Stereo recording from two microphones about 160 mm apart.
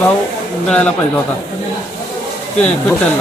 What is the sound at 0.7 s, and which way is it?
Speech, 5° left (ahead or behind).